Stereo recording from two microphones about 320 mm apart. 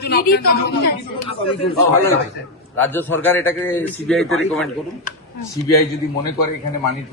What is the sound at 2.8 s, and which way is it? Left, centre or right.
A man's voice, centre.